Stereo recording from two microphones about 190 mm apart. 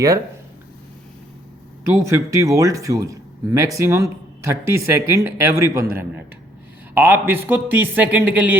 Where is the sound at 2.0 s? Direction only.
15° right (ahead or behind).